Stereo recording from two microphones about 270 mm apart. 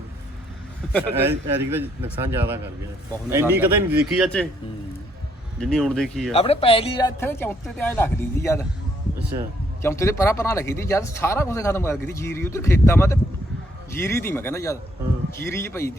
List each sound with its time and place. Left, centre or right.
1.1 s speech: centre
5.5 s speech: centre
6.3 s speech: left
7.2 s speech: centre
9.3 s speech: centre
9.8 s speech: centre